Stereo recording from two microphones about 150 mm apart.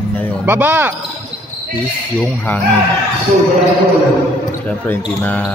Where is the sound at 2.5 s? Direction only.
10° left (ahead or behind).